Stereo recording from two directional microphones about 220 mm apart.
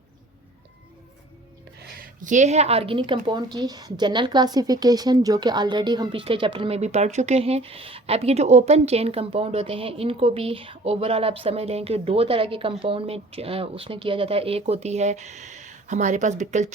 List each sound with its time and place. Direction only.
2.0 s a woman's voice: 35° right (ahead or behind)